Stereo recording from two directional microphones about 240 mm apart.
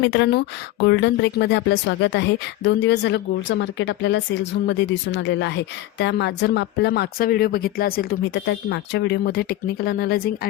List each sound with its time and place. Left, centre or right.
0.0 s a woman's voice: left